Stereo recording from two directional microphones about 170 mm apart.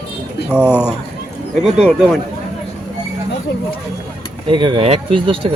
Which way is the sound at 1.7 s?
5° right (ahead or behind).